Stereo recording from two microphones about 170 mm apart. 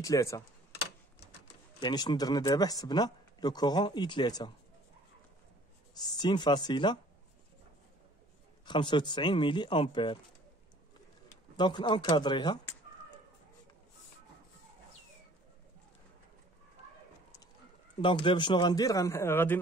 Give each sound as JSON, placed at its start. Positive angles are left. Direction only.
{"t": 0.0, "sound": "speech", "side_deg": 20}
{"t": 1.8, "sound": "speech", "side_deg": 25}
{"t": 5.9, "sound": "speech", "side_deg": 25}
{"t": 8.6, "sound": "speech", "side_deg": 25}
{"t": 11.5, "sound": "speech", "side_deg": 25}
{"t": 18.0, "sound": "speech", "side_deg": 30}